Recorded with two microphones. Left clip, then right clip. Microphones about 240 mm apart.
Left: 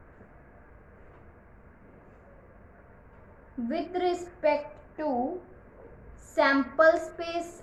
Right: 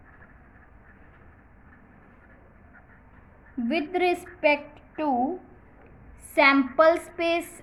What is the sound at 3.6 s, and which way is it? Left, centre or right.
Speech, right.